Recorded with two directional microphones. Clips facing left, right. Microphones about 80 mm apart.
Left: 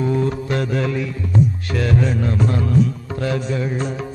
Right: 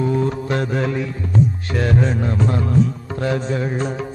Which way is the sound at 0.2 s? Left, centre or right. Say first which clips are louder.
Even; right.